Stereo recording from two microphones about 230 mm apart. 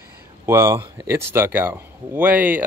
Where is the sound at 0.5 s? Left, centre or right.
Centre.